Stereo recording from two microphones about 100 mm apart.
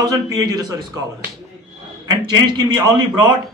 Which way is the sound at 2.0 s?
45° right (ahead or behind).